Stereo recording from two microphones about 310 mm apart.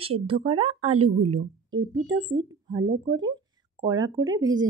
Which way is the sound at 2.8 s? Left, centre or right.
Right.